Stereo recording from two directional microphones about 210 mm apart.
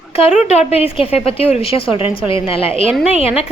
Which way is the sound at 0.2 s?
30° left (ahead or behind).